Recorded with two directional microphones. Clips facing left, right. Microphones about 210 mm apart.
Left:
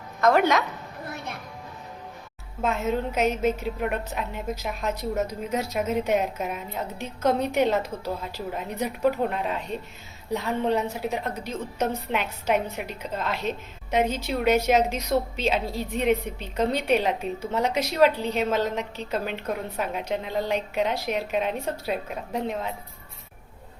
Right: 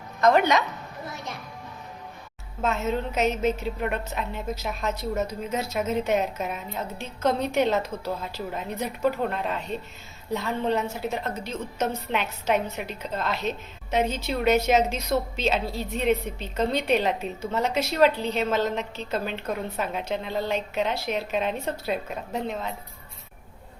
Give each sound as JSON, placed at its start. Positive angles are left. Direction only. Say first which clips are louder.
{"t": 0.2, "sound": "speech", "louder": "even", "side_deg": 5}
{"t": 1.0, "sound": "music", "louder": "left 1 dB", "side_deg": 60}
{"t": 2.6, "sound": "a woman's voice", "louder": "left 1 dB", "side_deg": 10}